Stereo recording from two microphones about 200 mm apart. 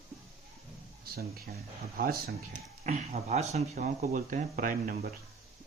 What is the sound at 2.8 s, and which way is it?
Speech, 35° right (ahead or behind).